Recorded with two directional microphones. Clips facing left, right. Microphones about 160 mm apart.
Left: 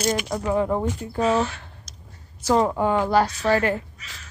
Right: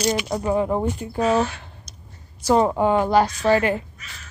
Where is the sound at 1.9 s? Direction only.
90° left.